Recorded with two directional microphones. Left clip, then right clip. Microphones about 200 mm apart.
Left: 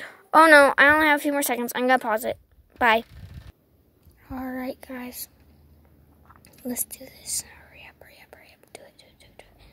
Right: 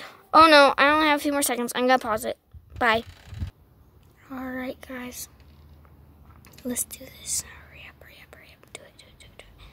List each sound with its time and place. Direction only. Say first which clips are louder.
0.0 s speech: even; 5° left (ahead or behind)
4.3 s speech: left 1 dB; 10° left (ahead or behind)
6.4 s whispering: right 1 dB; 5° left (ahead or behind)